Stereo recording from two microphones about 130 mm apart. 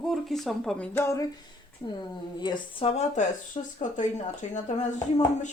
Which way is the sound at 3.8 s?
75° left (ahead or behind).